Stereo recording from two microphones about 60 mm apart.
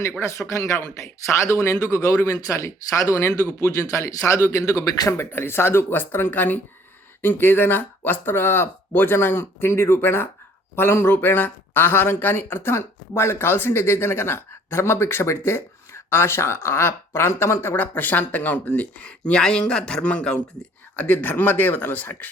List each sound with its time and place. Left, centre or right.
0.2 s speech: left